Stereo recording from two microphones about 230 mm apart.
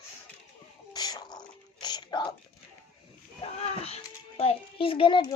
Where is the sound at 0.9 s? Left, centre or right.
Centre.